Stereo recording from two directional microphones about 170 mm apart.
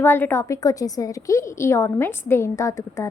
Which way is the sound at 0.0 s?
10° left (ahead or behind).